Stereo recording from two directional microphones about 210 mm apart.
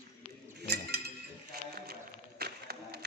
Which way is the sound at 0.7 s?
50° right (ahead or behind).